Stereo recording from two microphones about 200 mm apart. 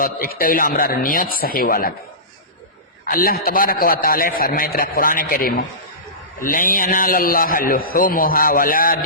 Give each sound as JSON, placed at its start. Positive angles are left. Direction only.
{"t": 0.0, "sound": "a man's voice", "side_deg": 50}
{"t": 3.1, "sound": "a man's voice", "side_deg": 45}